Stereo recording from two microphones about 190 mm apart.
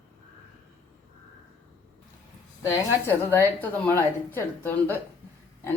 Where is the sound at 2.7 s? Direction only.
10° left (ahead or behind).